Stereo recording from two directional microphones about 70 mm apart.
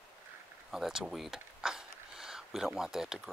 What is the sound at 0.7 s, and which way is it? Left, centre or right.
Speech, centre.